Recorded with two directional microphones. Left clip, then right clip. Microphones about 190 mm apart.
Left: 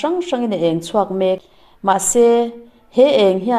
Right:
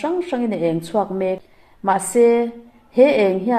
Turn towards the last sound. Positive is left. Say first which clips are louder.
# left 3 dB
turn(degrees=25)  # may be behind; listen again after turning